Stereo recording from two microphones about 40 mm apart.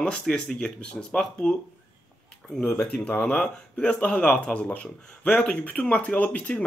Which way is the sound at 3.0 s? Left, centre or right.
Left.